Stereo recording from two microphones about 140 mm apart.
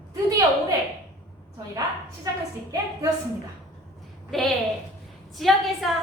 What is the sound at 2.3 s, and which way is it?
Speech, 25° right (ahead or behind).